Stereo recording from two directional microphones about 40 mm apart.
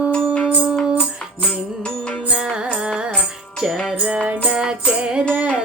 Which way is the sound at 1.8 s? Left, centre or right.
Left.